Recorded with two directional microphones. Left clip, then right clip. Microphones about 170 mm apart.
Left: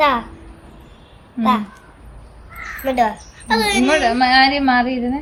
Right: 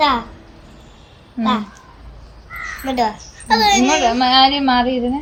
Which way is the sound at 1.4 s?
40° left (ahead or behind).